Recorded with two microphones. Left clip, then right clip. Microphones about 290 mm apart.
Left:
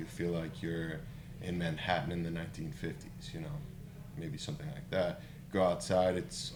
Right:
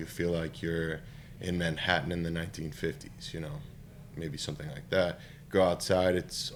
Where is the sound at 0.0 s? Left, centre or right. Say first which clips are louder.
Right 5 dB; right.